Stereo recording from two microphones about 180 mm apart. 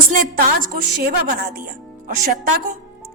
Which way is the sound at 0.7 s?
50° right (ahead or behind).